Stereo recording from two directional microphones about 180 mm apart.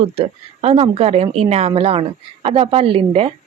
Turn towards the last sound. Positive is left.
turn(degrees=-30)  # may be behind; listen again after turning